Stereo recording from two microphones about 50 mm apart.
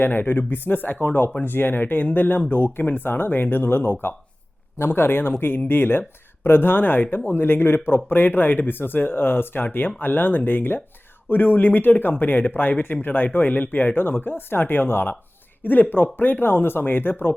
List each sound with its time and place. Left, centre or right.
0.0 s speech: left